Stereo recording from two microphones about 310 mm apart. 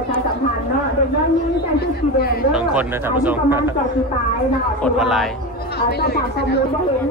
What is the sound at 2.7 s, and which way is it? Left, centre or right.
Speech, centre.